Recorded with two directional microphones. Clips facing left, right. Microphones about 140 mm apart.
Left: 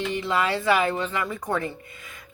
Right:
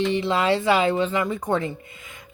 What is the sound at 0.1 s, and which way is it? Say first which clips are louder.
Speech: right 4 dB; 25° right (ahead or behind).